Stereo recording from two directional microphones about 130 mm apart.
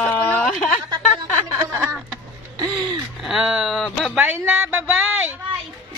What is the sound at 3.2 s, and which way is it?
Speech, 5° right (ahead or behind).